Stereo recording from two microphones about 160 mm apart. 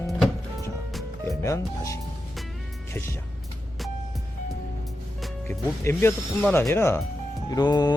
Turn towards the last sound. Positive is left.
turn(degrees=25)  # may be behind; listen again after turning